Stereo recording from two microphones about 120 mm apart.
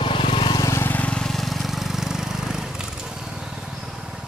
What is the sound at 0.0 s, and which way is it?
Vehicle, 45° left (ahead or behind).